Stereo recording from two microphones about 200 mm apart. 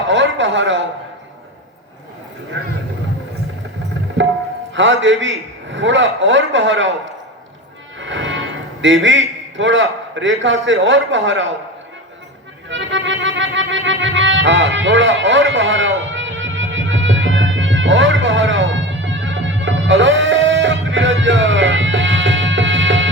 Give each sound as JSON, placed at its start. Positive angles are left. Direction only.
{"t": 0.1, "sound": "speech", "side_deg": -70}
{"t": 4.7, "sound": "a man's voice", "side_deg": -70}
{"t": 7.9, "sound": "a man's voice", "side_deg": -70}
{"t": 12.6, "sound": "music", "side_deg": -70}